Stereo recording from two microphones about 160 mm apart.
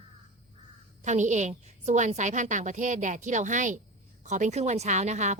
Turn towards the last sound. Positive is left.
turn(degrees=-45)  # may be behind; listen again after turning